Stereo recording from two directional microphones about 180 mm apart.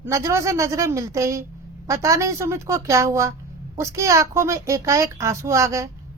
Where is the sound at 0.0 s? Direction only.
15° right (ahead or behind).